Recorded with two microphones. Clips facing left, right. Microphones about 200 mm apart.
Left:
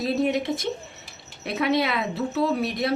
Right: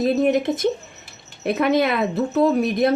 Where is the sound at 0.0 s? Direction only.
50° right (ahead or behind).